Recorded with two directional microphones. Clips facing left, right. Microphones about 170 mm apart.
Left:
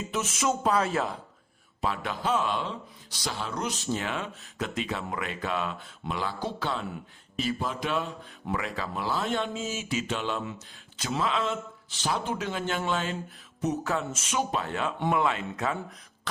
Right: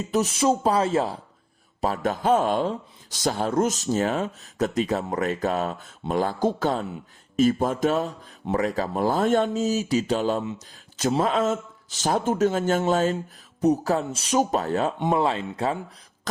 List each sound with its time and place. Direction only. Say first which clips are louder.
0.1 s speech: right 8 dB; 35° right (ahead or behind)
1.8 s speech: right 6 dB; 40° right (ahead or behind)